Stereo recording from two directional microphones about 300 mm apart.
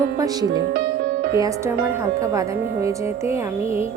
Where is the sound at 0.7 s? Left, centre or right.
Right.